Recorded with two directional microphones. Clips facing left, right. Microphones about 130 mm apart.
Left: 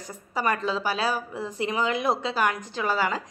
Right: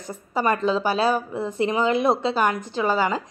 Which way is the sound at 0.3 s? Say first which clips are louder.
Right 5 dB; 25° right (ahead or behind).